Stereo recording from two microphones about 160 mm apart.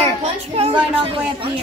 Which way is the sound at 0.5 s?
35° right (ahead or behind).